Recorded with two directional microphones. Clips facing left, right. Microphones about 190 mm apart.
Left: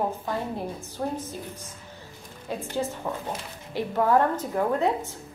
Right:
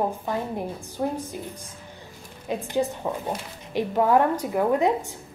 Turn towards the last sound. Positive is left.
turn(degrees=-15)  # may be behind; listen again after turning